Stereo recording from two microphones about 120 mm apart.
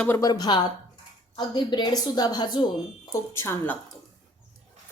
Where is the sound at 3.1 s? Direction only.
25° left (ahead or behind).